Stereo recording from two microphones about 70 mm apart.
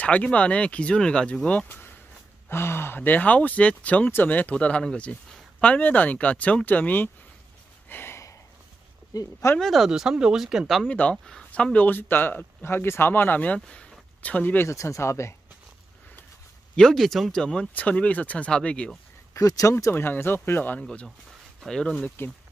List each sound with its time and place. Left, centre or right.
0.0 s speech: centre
1.7 s a sound: left
2.5 s speech: left
7.9 s a sound: left
9.1 s speech: left
9.6 s speech: centre
9.8 s speech: centre
10.9 s speech: centre
14.6 s speech: left
16.7 s speech: centre
19.3 s speech: left
19.7 s speech: left
21.6 s speech: centre